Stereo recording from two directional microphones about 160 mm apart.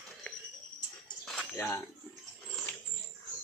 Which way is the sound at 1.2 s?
5° left (ahead or behind).